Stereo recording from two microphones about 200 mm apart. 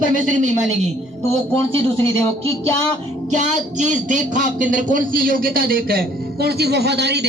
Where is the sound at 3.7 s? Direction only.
40° right (ahead or behind); by 7.3 s 55° right (ahead or behind).